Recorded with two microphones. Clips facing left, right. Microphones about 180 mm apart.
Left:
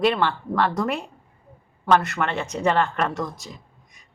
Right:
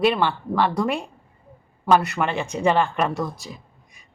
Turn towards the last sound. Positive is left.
turn(degrees=-10)  # may be behind; listen again after turning